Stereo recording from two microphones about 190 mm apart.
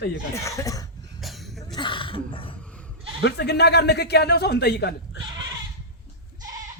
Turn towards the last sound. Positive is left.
turn(degrees=60)  # may be behind; listen again after turning